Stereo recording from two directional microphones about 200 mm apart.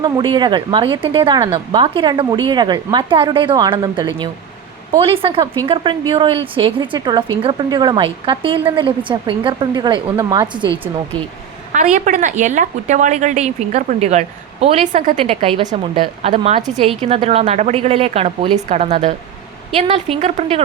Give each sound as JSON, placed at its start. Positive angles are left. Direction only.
{"t": 0.0, "sound": "a woman's voice", "side_deg": -20}
{"t": 11.7, "sound": "a woman's voice", "side_deg": -35}